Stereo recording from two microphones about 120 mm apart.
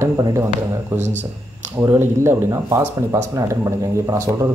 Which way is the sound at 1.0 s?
85° right.